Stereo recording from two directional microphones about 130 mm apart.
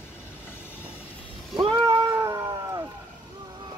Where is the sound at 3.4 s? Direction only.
35° right (ahead or behind).